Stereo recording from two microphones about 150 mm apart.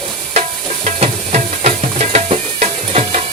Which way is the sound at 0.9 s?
50° right (ahead or behind).